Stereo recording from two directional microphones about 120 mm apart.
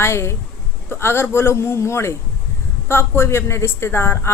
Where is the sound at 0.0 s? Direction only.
20° left (ahead or behind).